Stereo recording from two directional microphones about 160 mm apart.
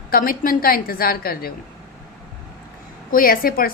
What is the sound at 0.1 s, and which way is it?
A woman's voice, 65° left (ahead or behind).